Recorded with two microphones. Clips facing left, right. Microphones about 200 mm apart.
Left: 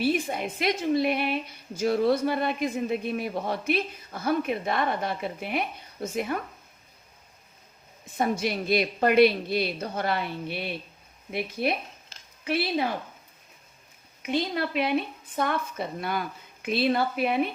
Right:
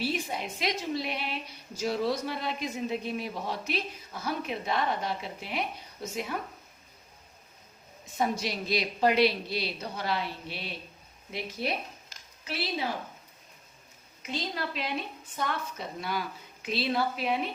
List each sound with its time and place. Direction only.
0.0 s a woman's voice: 55° left (ahead or behind)
8.2 s a woman's voice: 55° left (ahead or behind)
14.2 s a woman's voice: 60° left (ahead or behind)